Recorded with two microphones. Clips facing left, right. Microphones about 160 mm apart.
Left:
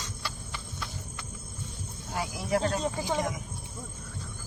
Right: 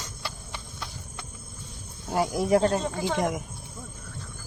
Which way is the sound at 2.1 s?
40° right (ahead or behind).